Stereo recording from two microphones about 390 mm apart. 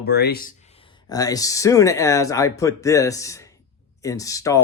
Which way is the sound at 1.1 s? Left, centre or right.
Centre.